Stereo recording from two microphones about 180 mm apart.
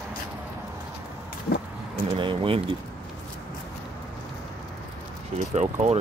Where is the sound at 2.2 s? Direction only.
30° right (ahead or behind).